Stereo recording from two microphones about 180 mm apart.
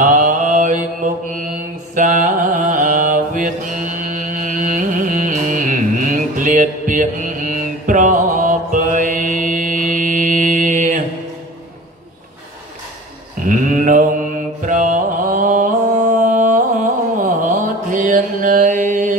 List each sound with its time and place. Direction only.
0.0 s mantra: 45° right (ahead or behind)
13.4 s a sound: 45° right (ahead or behind)
14.7 s mantra: 45° right (ahead or behind)